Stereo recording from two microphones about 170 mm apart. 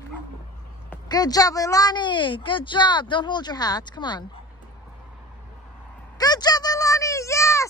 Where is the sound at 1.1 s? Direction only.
20° left (ahead or behind).